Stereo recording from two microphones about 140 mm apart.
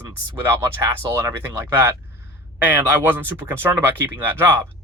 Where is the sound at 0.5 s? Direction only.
20° right (ahead or behind).